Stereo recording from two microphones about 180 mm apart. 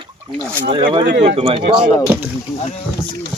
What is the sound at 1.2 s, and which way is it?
Speech, 35° right (ahead or behind).